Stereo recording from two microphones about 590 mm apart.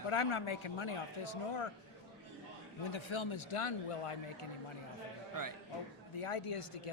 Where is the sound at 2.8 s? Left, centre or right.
Left.